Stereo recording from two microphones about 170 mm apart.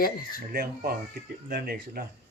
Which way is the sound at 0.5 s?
55° right (ahead or behind).